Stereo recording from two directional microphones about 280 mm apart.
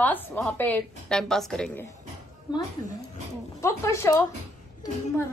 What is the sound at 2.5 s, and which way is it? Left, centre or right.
Speech, centre.